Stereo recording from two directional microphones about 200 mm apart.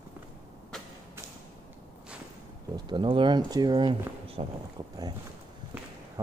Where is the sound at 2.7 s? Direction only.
25° right (ahead or behind).